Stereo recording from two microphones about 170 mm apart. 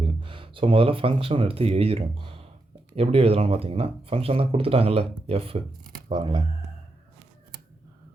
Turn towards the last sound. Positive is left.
turn(degrees=-25)  # may be behind; listen again after turning